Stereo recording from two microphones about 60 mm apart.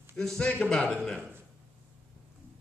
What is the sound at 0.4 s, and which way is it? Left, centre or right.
Speech, centre.